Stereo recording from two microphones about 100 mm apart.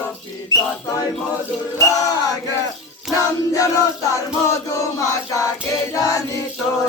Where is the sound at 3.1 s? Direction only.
Centre (ahead or behind).